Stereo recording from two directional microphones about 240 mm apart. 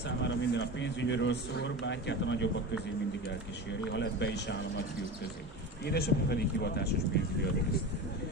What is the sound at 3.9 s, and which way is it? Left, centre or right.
Speech, left.